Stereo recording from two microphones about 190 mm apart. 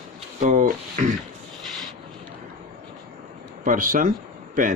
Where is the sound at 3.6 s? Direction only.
45° right (ahead or behind).